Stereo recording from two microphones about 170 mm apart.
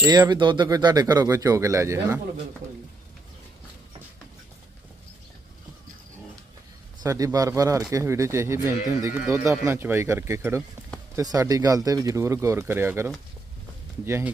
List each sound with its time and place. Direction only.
0.0 s speech: 25° right (ahead or behind)
7.0 s speech: 20° right (ahead or behind)